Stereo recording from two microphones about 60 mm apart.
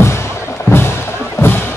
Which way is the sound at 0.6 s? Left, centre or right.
Left.